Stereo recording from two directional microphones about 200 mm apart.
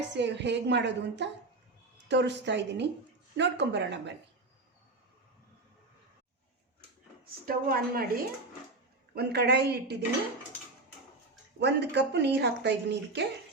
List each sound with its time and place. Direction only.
0.1 s speech: 60° right (ahead or behind)
7.4 s a woman's voice: 45° right (ahead or behind)
9.1 s speech: 55° right (ahead or behind)
11.6 s speech: 60° right (ahead or behind)